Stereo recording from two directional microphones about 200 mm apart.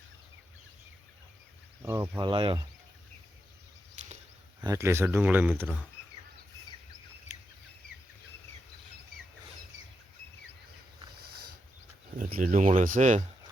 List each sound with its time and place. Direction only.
1.8 s speech: 15° right (ahead or behind)
2.1 s speech: 25° right (ahead or behind)
4.6 s speech: 15° right (ahead or behind)
12.1 s speech: 40° right (ahead or behind)